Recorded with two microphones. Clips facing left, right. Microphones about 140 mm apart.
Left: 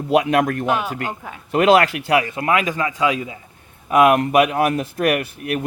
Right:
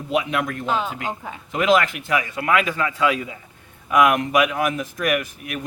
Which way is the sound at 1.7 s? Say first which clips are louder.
Left 2 dB; 70° left (ahead or behind).